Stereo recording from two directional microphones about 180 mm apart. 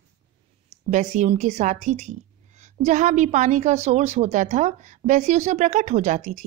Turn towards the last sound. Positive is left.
turn(degrees=-40)  # may be behind; listen again after turning